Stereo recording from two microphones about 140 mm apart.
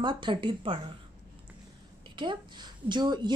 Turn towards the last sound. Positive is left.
turn(degrees=-30)  # may be behind; listen again after turning